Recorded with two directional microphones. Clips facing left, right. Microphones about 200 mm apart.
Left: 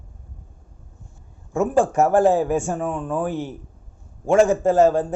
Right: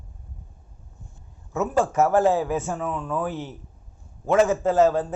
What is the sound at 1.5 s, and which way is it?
Speech, 30° left (ahead or behind).